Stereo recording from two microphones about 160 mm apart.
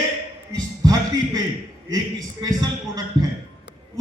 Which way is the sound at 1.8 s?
25° right (ahead or behind).